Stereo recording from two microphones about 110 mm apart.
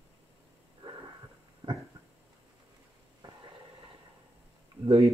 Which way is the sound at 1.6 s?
45° right (ahead or behind).